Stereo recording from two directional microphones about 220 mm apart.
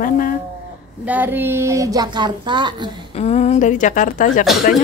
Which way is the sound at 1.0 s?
10° right (ahead or behind).